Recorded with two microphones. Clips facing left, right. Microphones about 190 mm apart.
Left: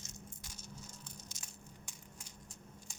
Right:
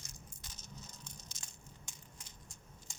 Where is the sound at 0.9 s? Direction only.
10° left (ahead or behind).